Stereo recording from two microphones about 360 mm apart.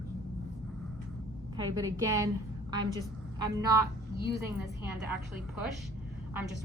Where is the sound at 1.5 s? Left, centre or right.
Centre.